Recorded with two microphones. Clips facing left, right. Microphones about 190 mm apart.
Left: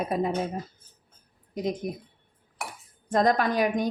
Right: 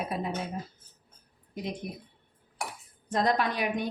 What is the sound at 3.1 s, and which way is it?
Speech, 45° left (ahead or behind).